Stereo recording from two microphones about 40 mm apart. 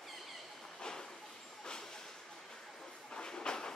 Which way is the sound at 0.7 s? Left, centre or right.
Centre.